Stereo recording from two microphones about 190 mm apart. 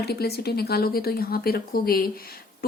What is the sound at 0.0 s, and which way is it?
A woman's voice, 55° left (ahead or behind).